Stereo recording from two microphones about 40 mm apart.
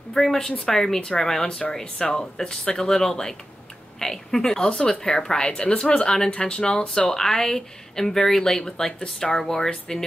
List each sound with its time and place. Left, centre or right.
0.1 s a woman's voice: centre
5.5 s speech: left